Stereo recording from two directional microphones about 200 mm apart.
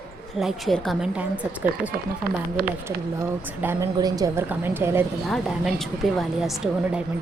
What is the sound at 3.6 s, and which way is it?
A woman's voice, 15° right (ahead or behind).